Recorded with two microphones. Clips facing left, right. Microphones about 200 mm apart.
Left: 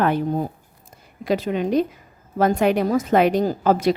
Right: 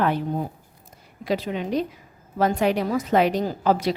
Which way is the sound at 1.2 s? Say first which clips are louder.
Left 4 dB; 50° left (ahead or behind).